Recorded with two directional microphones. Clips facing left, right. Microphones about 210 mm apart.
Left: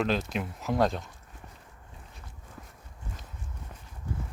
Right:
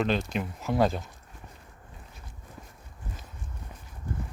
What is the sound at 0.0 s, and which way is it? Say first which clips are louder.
Speech: right 1 dB; centre (ahead or behind).